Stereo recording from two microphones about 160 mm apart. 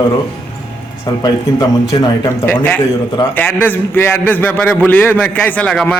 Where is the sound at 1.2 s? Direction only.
25° left (ahead or behind).